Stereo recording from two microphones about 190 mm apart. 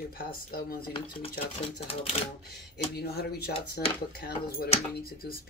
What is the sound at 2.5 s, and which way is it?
Speech, 55° left (ahead or behind).